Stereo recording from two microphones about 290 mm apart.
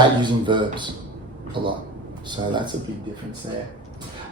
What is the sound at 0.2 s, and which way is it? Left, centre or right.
Speech, centre.